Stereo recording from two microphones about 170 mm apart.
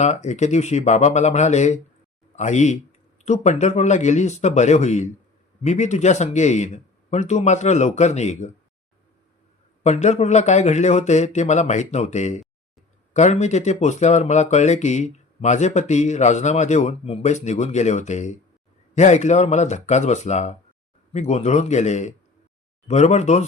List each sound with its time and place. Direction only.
0.0 s speech: 40° left (ahead or behind)
9.8 s a man's voice: 40° left (ahead or behind)